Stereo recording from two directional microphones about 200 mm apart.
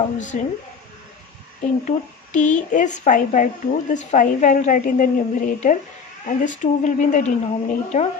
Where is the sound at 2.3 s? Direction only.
40° left (ahead or behind).